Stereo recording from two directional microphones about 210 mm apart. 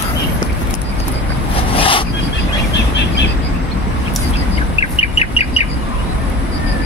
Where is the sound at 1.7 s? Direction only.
25° left (ahead or behind).